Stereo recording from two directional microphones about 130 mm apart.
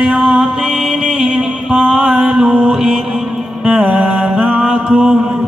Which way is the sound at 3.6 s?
5° right (ahead or behind).